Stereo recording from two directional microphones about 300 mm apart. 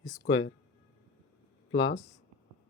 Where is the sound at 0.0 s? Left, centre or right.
Left.